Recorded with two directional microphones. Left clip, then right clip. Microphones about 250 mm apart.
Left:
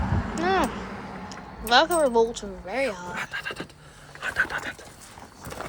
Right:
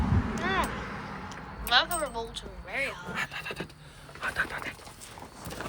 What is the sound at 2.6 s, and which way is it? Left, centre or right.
Speech, centre.